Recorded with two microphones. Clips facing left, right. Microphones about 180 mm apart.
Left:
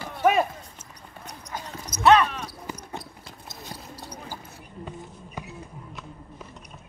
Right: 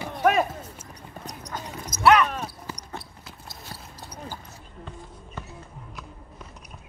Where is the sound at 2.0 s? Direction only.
30° left (ahead or behind).